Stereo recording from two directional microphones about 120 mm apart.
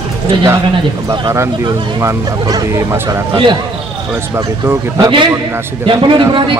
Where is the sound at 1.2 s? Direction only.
30° right (ahead or behind).